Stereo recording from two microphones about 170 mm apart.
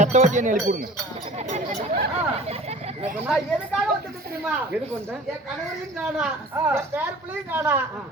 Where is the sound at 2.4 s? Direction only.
35° right (ahead or behind).